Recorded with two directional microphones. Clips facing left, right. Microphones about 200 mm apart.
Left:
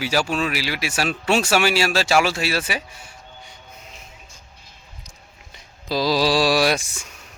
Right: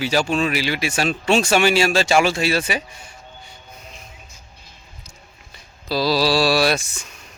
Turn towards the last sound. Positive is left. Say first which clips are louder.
# right 1 dB
turn(degrees=10)  # may be behind; listen again after turning